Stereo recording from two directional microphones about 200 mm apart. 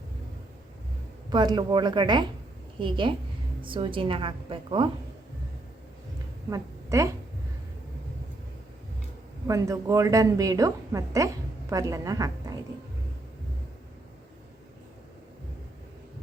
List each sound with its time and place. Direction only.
1.3 s a woman's voice: 20° right (ahead or behind)
6.5 s a woman's voice: 15° right (ahead or behind)
9.5 s a woman's voice: 15° right (ahead or behind)